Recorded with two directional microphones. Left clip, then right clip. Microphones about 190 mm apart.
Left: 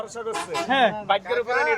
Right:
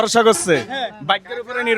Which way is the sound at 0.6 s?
70° left (ahead or behind).